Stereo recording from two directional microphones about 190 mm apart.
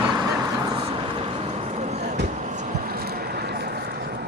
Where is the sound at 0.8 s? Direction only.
30° right (ahead or behind).